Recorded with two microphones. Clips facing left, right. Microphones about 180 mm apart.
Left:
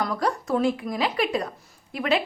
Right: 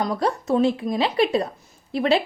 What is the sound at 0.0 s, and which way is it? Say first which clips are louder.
Speech: right 2 dB; 25° right (ahead or behind).